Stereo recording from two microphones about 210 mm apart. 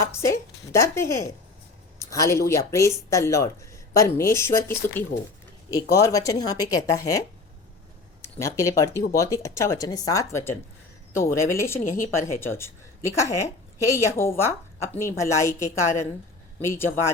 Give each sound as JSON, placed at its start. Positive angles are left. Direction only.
{"t": 0.0, "sound": "a woman's voice", "side_deg": 15}
{"t": 2.0, "sound": "a sound", "side_deg": 15}
{"t": 2.5, "sound": "a woman's voice", "side_deg": 15}
{"t": 8.2, "sound": "a woman's voice", "side_deg": 15}